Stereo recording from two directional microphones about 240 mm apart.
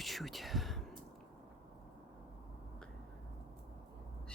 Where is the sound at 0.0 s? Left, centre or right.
Centre.